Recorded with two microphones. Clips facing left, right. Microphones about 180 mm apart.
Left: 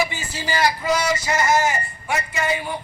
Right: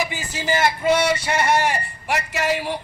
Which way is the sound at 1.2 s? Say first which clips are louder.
Even; 60° right (ahead or behind).